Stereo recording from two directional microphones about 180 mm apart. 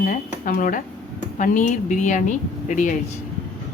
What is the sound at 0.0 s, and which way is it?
A woman's voice, 50° left (ahead or behind).